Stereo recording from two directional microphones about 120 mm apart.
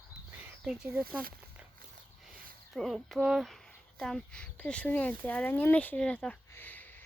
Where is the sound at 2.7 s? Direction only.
Centre (ahead or behind).